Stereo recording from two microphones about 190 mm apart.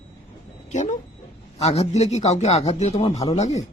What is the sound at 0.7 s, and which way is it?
Speech, 40° left (ahead or behind).